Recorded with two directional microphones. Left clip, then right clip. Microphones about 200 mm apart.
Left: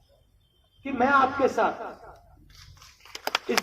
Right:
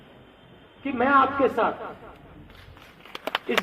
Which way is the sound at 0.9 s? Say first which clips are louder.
Right 1 dB; 35° right (ahead or behind).